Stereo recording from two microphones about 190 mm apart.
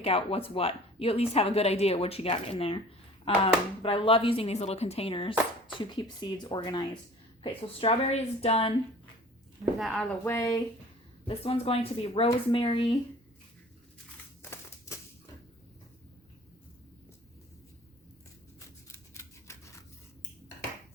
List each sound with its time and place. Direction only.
0.0 s speech: 30° left (ahead or behind)
9.7 s a woman's voice: centre (ahead or behind)
10.2 s speech: 15° left (ahead or behind)
11.3 s speech: 30° left (ahead or behind)
18.9 s scissors: 15° left (ahead or behind)